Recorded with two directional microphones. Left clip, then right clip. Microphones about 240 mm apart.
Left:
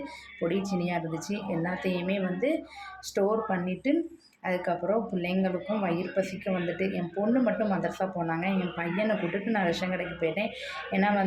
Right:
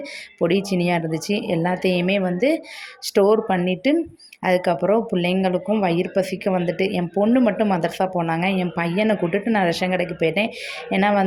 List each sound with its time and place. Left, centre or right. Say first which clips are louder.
0.3 s speech: right 10 dB; right